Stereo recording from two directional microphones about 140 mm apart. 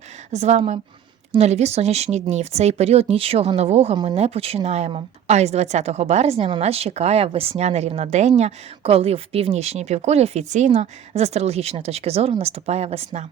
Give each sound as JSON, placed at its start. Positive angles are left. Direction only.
{"t": 0.3, "sound": "a woman's voice", "side_deg": -50}